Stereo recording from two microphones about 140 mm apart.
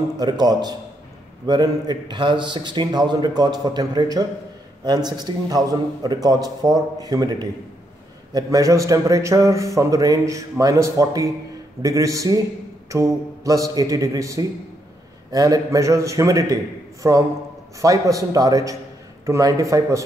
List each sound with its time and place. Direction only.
0.2 s a man's voice: 30° right (ahead or behind)